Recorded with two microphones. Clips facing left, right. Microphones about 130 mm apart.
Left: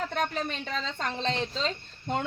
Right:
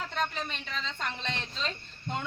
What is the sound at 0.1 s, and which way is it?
A woman's voice, 45° left (ahead or behind).